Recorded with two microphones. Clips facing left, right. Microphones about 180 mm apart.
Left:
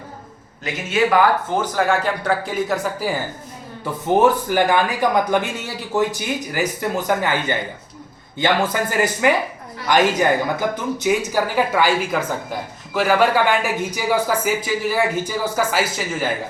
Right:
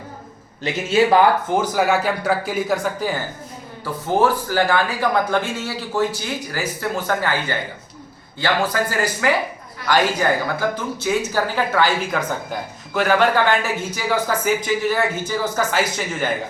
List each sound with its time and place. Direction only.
0.6 s a man's voice: 30° right (ahead or behind)
1.6 s a man's voice: 10° right (ahead or behind)
4.1 s speech: 20° left (ahead or behind)